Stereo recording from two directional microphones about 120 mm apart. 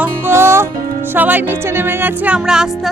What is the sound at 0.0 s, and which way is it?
Music, 20° right (ahead or behind).